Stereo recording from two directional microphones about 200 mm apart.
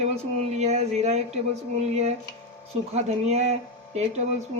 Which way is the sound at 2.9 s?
35° right (ahead or behind).